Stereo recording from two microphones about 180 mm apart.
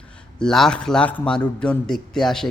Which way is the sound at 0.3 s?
5° left (ahead or behind).